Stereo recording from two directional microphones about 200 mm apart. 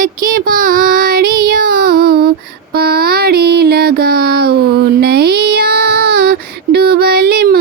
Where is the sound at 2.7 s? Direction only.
50° right (ahead or behind).